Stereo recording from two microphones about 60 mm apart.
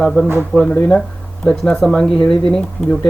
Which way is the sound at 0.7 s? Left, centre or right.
Left.